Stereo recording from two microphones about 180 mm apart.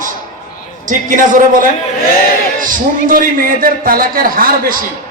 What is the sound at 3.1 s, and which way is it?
A man's voice, 50° right (ahead or behind).